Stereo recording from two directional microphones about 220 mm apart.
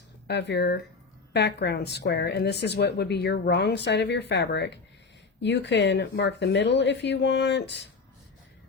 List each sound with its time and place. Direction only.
0.3 s a woman's voice: 50° left (ahead or behind)